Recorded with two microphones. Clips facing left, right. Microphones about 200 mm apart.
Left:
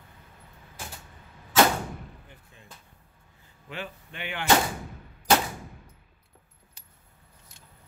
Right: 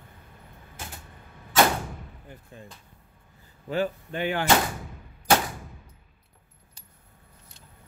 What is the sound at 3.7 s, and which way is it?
Speech, 40° right (ahead or behind).